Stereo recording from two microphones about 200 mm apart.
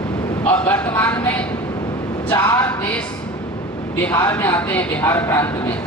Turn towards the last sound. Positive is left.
turn(degrees=10)  # may be behind; listen again after turning